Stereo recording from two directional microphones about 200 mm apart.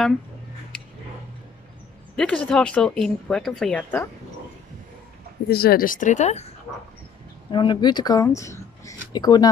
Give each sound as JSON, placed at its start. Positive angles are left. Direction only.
{"t": 2.1, "sound": "speech", "side_deg": 5}
{"t": 5.5, "sound": "speech", "side_deg": 50}
{"t": 7.5, "sound": "speech", "side_deg": 20}